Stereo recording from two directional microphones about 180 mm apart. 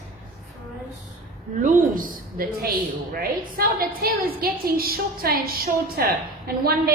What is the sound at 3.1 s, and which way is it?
A woman's voice, 55° right (ahead or behind).